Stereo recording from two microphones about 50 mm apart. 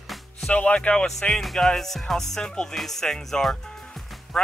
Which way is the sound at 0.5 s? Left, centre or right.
Left.